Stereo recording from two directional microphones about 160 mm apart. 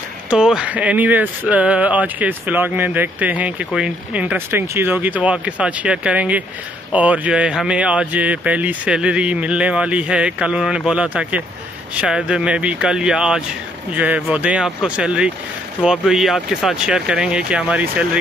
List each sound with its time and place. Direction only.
0.3 s speech: 5° right (ahead or behind)